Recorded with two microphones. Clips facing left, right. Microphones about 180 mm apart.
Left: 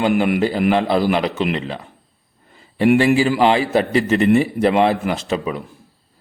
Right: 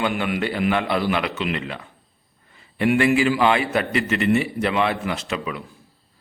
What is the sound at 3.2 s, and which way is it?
A man's voice, 35° left (ahead or behind).